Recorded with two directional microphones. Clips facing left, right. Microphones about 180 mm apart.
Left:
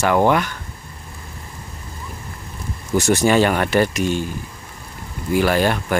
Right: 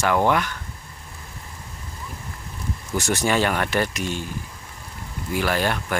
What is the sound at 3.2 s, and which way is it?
Speech, 10° left (ahead or behind).